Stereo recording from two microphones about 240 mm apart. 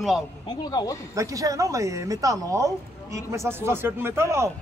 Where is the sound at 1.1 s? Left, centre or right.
Centre.